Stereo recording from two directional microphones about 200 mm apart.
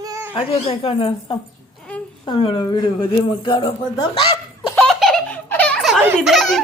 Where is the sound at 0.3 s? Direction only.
30° left (ahead or behind).